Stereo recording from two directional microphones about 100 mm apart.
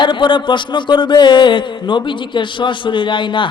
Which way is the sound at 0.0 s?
55° left (ahead or behind).